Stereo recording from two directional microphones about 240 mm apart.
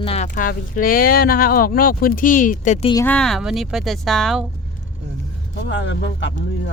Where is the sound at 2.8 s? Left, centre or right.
Centre.